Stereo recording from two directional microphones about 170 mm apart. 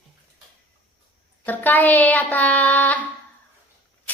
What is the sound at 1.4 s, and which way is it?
Child singing, 10° left (ahead or behind).